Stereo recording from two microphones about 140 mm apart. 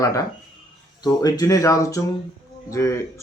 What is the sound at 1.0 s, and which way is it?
A man's voice, 25° left (ahead or behind).